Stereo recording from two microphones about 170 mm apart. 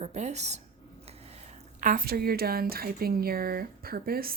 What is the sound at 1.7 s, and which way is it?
Speech, 50° right (ahead or behind).